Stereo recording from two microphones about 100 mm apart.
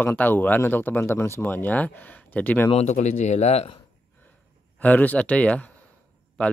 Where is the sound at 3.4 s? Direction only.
90° left.